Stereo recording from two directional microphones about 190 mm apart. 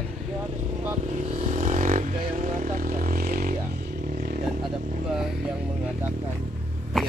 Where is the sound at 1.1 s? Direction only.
35° right (ahead or behind).